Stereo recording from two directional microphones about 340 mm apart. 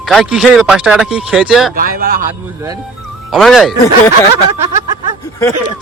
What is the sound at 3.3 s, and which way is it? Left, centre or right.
Speech, centre.